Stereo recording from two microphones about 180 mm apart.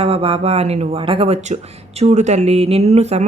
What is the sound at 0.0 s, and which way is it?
Speech, 30° right (ahead or behind).